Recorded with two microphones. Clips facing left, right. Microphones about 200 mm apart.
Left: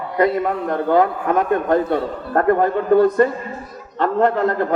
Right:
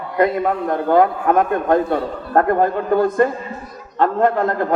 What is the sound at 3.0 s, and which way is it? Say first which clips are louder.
A man's voice: left 1 dB; 50° right (ahead or behind).